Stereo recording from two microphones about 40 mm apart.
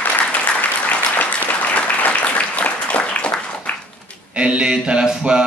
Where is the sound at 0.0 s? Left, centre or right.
Left.